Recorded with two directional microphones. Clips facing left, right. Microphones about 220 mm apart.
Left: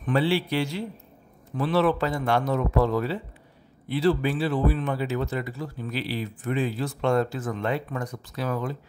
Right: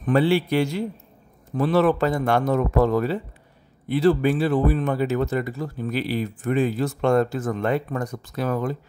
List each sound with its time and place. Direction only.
0.0 s speech: 50° right (ahead or behind)